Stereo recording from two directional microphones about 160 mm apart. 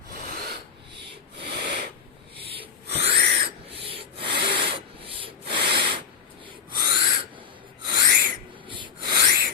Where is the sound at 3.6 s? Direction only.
35° right (ahead or behind).